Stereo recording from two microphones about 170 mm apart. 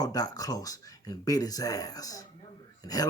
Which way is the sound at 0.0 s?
25° left (ahead or behind).